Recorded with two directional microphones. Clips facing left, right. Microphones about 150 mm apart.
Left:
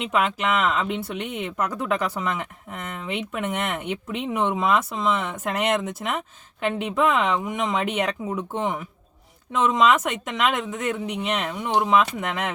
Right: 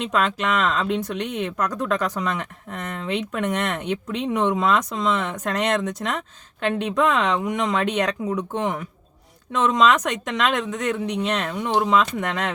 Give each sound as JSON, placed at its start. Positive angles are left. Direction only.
{"t": 0.1, "sound": "speech", "side_deg": 10}